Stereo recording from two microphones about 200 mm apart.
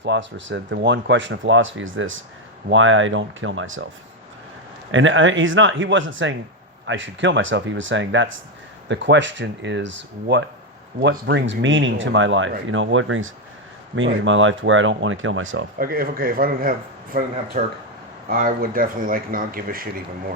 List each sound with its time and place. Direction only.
0.0 s speech: 65° right (ahead or behind)
4.9 s speech: 70° right (ahead or behind)
15.8 s speech: 45° right (ahead or behind)